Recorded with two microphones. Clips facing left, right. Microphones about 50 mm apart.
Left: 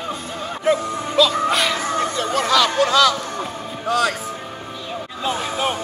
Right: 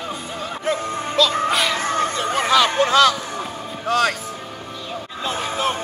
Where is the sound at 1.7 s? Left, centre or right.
Right.